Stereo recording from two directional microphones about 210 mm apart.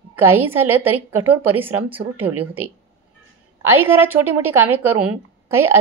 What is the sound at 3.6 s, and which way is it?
A woman's voice, 10° right (ahead or behind).